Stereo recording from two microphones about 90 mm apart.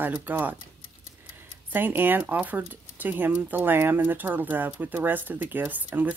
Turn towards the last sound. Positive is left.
turn(degrees=-20)  # may be behind; listen again after turning